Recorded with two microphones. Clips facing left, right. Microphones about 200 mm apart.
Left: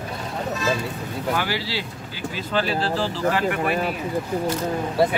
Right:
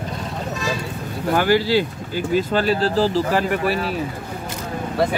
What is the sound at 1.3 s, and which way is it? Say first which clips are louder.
Speech: right 12 dB; 45° right (ahead or behind).